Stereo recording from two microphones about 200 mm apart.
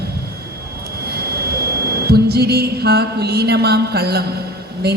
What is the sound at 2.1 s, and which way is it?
A woman's voice, 50° right (ahead or behind).